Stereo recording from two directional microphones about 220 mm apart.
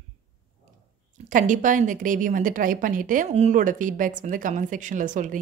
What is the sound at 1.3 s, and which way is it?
A woman's voice, 35° right (ahead or behind).